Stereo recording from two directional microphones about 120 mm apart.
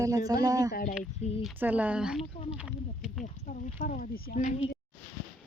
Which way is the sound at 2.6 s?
5° right (ahead or behind).